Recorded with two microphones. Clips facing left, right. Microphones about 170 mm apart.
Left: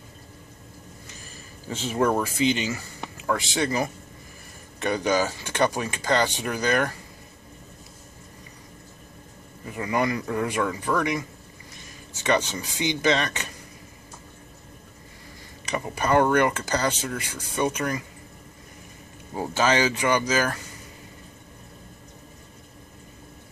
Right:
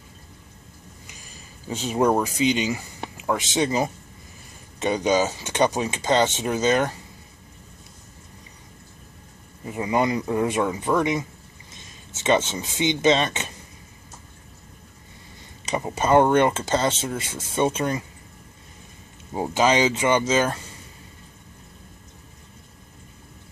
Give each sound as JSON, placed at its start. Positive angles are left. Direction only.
{"t": 1.0, "sound": "speech", "side_deg": -15}
{"t": 9.7, "sound": "speech", "side_deg": -20}
{"t": 15.6, "sound": "speech", "side_deg": -20}
{"t": 19.3, "sound": "speech", "side_deg": -20}